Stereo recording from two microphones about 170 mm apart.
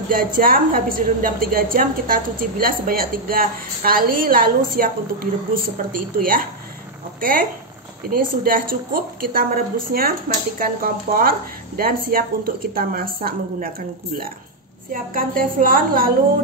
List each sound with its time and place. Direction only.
0.1 s a woman's voice: 55° right (ahead or behind)